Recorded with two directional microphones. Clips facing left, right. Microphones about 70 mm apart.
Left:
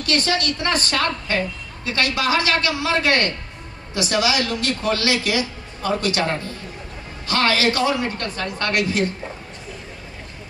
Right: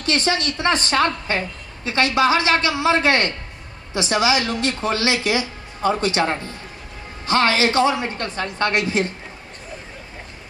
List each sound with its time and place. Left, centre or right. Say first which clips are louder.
0.0 s speech: even; right